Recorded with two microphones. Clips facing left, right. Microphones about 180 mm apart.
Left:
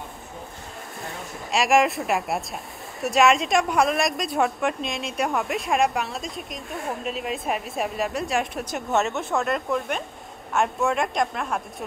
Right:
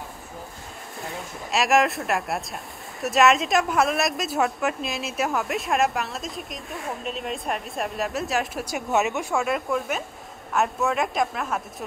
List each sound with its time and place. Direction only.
1.0 s speech: centre (ahead or behind)
9.0 s speech: 15° right (ahead or behind)
9.3 s speech: centre (ahead or behind)